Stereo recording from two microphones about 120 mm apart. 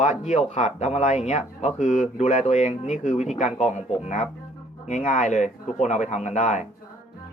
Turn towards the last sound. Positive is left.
turn(degrees=80)